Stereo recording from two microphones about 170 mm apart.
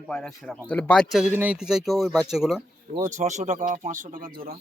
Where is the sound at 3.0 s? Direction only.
45° right (ahead or behind).